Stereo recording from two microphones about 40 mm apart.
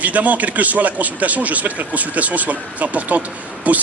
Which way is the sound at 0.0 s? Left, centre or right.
Right.